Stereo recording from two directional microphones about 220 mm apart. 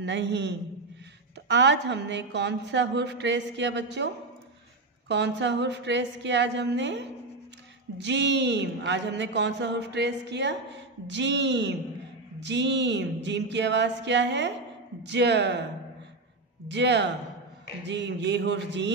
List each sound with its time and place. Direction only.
0.0 s a man's voice: 50° right (ahead or behind)
16.6 s a man's voice: 55° right (ahead or behind)